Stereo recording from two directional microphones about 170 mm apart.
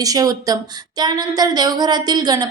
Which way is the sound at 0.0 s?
20° right (ahead or behind).